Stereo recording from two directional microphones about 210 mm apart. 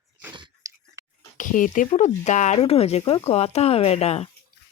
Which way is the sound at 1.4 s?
40° left (ahead or behind).